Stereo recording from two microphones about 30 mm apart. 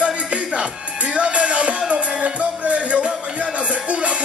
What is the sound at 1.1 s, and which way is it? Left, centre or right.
Music, right.